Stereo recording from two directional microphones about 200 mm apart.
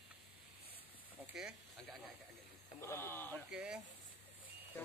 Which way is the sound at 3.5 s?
5° right (ahead or behind).